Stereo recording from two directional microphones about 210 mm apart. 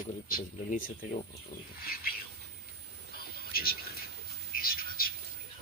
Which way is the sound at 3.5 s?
45° left (ahead or behind).